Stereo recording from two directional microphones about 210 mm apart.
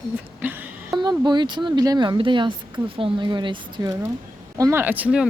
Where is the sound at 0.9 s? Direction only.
20° right (ahead or behind).